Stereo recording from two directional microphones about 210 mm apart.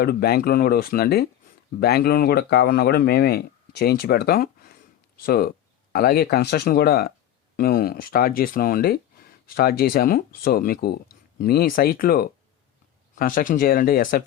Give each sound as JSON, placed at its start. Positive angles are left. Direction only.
{"t": 0.0, "sound": "speech", "side_deg": 50}